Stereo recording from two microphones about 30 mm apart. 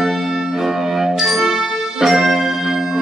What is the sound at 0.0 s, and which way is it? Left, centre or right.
Music, centre.